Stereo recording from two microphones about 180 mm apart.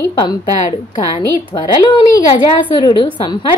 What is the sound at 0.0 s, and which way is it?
A woman's voice, 20° left (ahead or behind).